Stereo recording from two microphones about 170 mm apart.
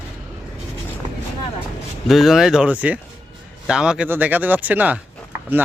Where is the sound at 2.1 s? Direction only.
Centre (ahead or behind).